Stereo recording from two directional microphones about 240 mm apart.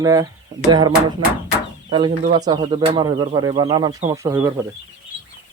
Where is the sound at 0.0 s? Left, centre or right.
Centre.